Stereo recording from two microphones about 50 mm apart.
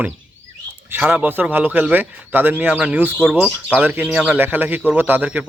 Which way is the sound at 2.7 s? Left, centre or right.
Right.